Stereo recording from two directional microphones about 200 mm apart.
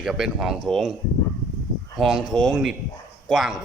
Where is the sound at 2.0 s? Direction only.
Centre (ahead or behind).